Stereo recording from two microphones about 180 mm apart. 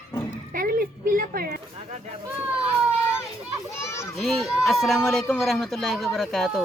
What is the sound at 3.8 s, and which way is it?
Children playing, 15° left (ahead or behind).